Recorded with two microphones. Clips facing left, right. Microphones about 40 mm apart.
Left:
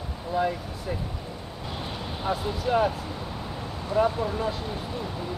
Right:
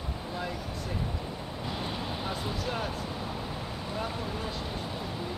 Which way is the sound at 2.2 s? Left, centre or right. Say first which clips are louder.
Left 10 dB; centre.